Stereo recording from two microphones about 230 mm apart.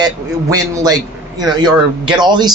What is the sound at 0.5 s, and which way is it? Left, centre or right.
Speech, centre.